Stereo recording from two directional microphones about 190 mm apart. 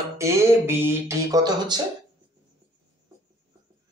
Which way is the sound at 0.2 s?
15° right (ahead or behind).